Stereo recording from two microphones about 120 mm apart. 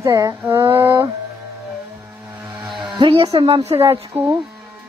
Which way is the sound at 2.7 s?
Centre (ahead or behind).